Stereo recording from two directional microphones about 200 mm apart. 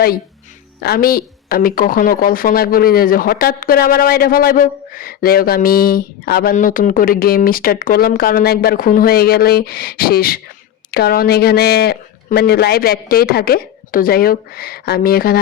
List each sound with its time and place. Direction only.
0.8 s a woman's voice: 50° left (ahead or behind)